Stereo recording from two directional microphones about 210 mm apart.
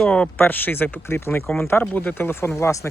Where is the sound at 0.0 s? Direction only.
5° left (ahead or behind).